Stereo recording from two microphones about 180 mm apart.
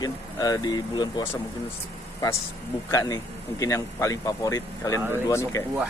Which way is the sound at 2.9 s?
20° left (ahead or behind).